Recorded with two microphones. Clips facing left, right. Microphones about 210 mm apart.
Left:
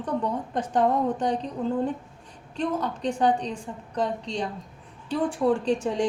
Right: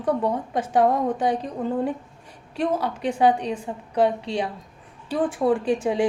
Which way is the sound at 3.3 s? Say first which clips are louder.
Right 3 dB; 60° right (ahead or behind).